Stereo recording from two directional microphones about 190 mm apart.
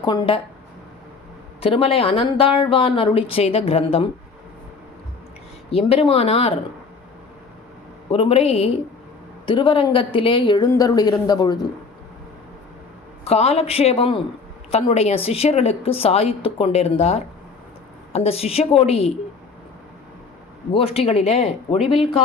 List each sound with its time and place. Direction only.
0.0 s speech: 25° left (ahead or behind)
1.6 s speech: 30° left (ahead or behind)
5.7 s a woman's voice: 30° left (ahead or behind)
8.1 s a woman's voice: 30° left (ahead or behind)
13.2 s a woman's voice: 35° left (ahead or behind)
20.7 s a woman's voice: 30° left (ahead or behind)